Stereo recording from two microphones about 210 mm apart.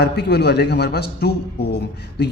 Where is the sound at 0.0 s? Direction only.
50° left (ahead or behind).